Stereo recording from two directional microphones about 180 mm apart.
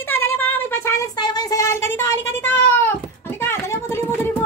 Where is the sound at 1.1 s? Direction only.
25° left (ahead or behind).